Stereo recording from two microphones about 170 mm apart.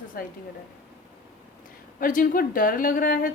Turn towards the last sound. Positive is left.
turn(degrees=55)  # may be behind; listen again after turning